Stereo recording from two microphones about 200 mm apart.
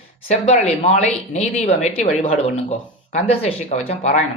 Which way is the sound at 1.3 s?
35° left (ahead or behind).